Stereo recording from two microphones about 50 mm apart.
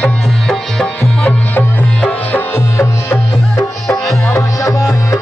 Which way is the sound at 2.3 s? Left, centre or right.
Left.